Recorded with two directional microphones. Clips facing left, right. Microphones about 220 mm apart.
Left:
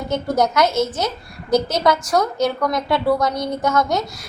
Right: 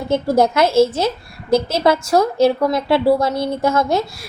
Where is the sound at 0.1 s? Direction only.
30° right (ahead or behind).